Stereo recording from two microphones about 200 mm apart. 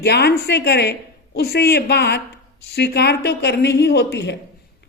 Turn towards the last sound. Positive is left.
turn(degrees=55)  # may be behind; listen again after turning